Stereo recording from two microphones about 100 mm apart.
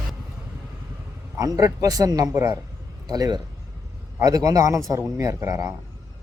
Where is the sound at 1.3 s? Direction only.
35° right (ahead or behind).